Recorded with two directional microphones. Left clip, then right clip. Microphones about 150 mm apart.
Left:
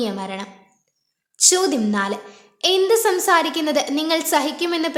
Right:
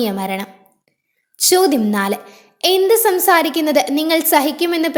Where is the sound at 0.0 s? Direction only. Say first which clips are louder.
Right 5 dB; 35° right (ahead or behind).